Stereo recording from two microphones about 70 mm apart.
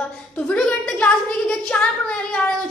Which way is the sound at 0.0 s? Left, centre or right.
Centre.